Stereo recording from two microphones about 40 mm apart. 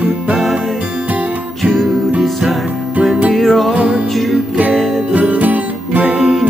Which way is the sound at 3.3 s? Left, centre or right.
Centre.